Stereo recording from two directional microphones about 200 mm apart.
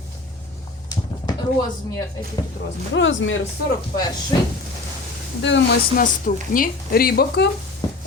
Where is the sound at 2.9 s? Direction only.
70° left (ahead or behind).